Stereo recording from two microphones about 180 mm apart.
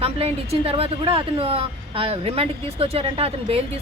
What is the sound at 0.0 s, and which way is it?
A woman's voice, 35° right (ahead or behind).